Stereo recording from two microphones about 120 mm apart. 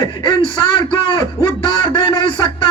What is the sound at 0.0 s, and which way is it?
A man's voice, 40° left (ahead or behind).